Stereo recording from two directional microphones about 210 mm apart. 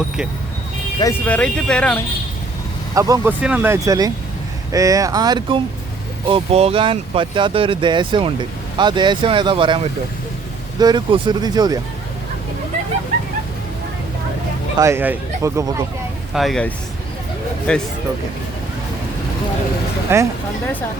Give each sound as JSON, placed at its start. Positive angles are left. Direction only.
{"t": 0.9, "sound": "speech", "side_deg": 10}
{"t": 2.9, "sound": "speech", "side_deg": -15}
{"t": 14.8, "sound": "speech", "side_deg": -10}
{"t": 16.3, "sound": "speech", "side_deg": 0}
{"t": 20.1, "sound": "speech", "side_deg": -10}